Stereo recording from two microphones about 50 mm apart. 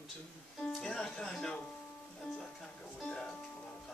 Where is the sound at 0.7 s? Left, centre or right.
Centre.